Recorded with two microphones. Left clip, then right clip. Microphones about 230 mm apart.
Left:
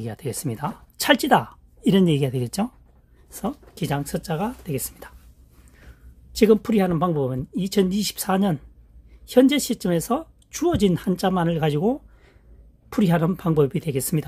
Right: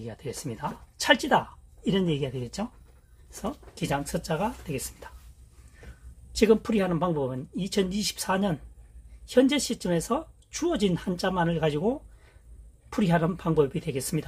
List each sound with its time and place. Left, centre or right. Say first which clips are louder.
0.0 s speech: left 6 dB; left
6.3 s speech: left 4 dB; left